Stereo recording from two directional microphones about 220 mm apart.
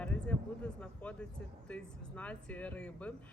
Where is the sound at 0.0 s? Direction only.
5° left (ahead or behind).